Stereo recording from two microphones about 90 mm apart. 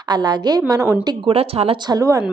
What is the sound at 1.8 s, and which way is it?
Speech, 45° right (ahead or behind).